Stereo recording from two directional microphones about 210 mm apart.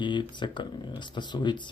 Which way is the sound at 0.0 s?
20° left (ahead or behind).